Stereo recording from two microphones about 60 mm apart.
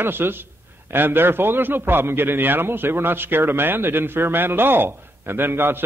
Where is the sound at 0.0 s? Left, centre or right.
Right.